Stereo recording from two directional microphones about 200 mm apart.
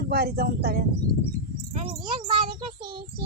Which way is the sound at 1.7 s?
25° right (ahead or behind).